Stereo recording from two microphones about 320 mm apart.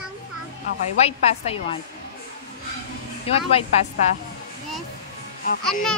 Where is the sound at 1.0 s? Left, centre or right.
Centre.